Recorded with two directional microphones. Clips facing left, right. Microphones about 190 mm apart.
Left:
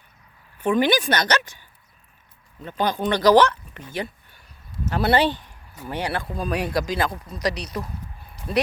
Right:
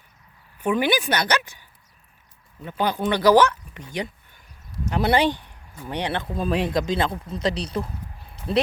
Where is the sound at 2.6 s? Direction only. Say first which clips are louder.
Even; 10° right (ahead or behind).